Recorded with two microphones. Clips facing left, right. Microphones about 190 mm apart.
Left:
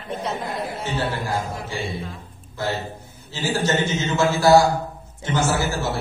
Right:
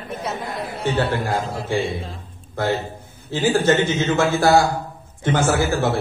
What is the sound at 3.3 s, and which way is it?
A man's voice, 55° right (ahead or behind).